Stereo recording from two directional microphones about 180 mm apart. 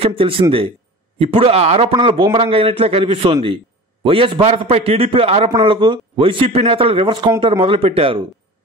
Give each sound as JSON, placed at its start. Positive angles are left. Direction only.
{"t": 0.0, "sound": "speech", "side_deg": -30}